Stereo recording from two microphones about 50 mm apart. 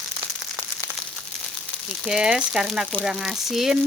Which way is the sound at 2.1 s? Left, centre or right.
Centre.